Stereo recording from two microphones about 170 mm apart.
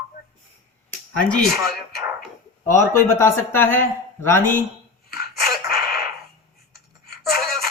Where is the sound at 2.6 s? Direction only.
15° left (ahead or behind).